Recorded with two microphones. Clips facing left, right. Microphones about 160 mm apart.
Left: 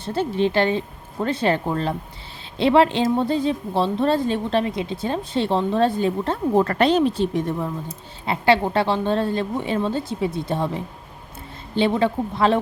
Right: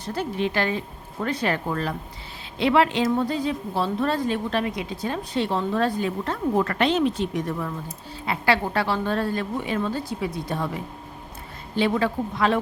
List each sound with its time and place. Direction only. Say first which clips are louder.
0.0 s a woman's voice: left 5 dB; 25° left (ahead or behind)
11.7 s a woman's voice: left 3 dB; 25° left (ahead or behind)